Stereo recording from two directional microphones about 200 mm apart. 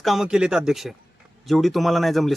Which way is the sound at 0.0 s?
Centre (ahead or behind).